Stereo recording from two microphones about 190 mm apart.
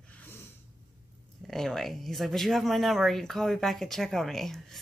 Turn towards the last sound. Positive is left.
turn(degrees=0)  # may be behind; listen again after turning